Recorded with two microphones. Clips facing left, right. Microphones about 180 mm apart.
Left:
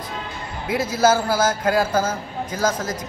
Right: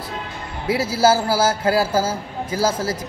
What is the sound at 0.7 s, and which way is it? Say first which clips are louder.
Speech: even; 10° right (ahead or behind).